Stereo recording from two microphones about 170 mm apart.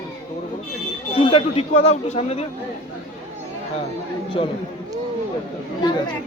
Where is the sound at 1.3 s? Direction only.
35° left (ahead or behind).